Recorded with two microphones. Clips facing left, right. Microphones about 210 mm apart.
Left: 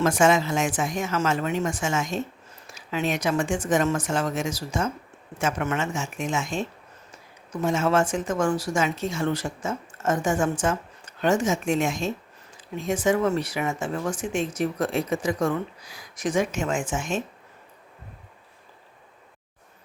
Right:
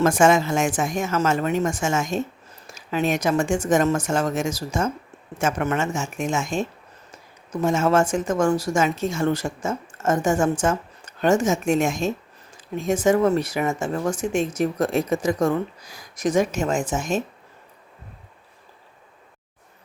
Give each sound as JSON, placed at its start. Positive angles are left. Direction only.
{"t": 0.0, "sound": "speech", "side_deg": -50}